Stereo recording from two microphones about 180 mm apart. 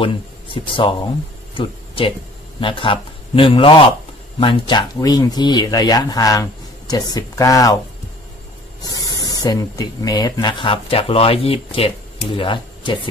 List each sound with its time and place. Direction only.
0.0 s speech: 30° left (ahead or behind)
8.8 s speech: 20° left (ahead or behind)